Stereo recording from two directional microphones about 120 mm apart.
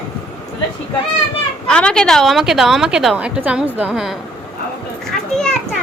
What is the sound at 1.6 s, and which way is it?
A woman's voice, 5° left (ahead or behind).